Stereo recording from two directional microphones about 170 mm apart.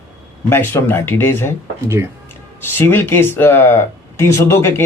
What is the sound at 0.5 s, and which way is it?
A man's voice, 15° left (ahead or behind).